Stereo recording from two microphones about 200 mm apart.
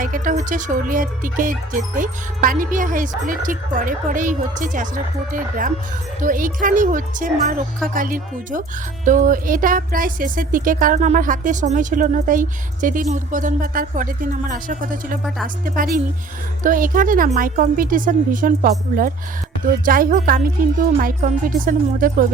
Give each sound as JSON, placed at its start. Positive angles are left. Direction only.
{"t": 0.0, "sound": "speech", "side_deg": -40}